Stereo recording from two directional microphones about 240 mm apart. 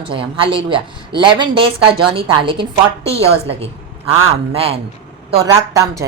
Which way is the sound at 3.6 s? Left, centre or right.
Right.